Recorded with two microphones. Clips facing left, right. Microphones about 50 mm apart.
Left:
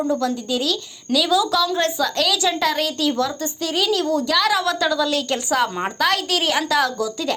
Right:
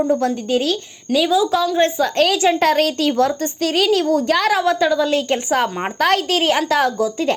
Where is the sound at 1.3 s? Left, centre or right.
Right.